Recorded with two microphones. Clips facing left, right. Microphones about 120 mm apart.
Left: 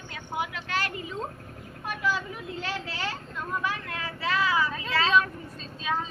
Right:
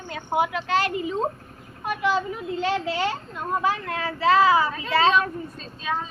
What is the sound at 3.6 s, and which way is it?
Speech, 35° right (ahead or behind).